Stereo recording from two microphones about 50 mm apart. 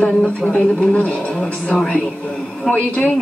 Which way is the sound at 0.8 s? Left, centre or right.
Left.